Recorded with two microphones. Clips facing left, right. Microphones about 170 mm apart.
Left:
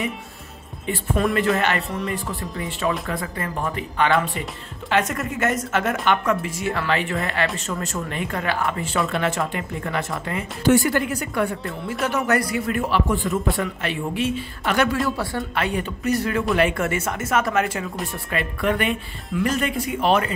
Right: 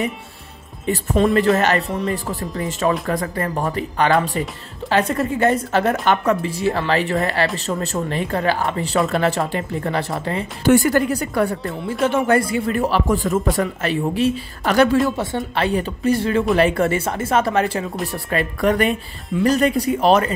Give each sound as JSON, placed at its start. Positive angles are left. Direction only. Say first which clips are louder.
{"t": 1.3, "sound": "speech", "louder": "right 5 dB", "side_deg": -40}
{"t": 10.7, "sound": "speech", "louder": "right 4 dB", "side_deg": -45}
{"t": 15.0, "sound": "speech", "louder": "right 3 dB", "side_deg": -20}